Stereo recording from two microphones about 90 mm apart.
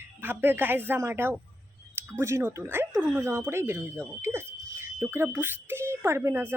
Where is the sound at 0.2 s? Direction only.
20° right (ahead or behind).